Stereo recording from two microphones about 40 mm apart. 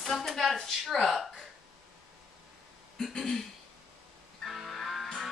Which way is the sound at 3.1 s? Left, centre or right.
Centre.